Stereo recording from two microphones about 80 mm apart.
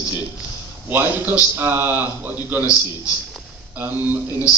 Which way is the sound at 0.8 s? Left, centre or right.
Right.